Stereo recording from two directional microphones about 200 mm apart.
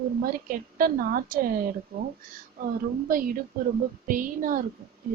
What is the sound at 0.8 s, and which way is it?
A woman's voice, 45° right (ahead or behind).